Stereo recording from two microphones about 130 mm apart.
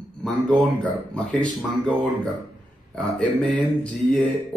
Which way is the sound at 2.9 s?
5° left (ahead or behind).